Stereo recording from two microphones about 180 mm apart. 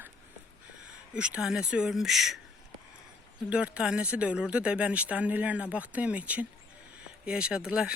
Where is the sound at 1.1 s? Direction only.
5° right (ahead or behind).